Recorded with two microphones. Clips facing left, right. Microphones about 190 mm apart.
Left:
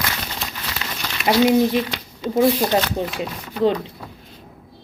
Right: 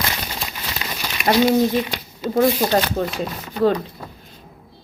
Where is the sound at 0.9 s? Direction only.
10° right (ahead or behind).